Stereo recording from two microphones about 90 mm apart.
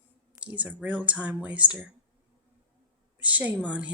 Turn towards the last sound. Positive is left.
turn(degrees=-15)  # may be behind; listen again after turning